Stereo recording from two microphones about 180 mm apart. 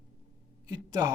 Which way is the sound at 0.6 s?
20° right (ahead or behind).